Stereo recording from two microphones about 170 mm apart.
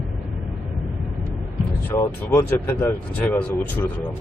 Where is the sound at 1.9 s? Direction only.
10° left (ahead or behind).